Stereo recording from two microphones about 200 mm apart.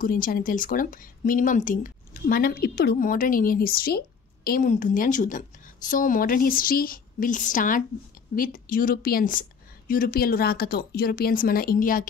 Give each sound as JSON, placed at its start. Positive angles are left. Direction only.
{"t": 0.0, "sound": "a woman's voice", "side_deg": 45}